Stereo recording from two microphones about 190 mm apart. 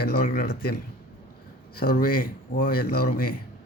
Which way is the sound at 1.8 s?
50° left (ahead or behind).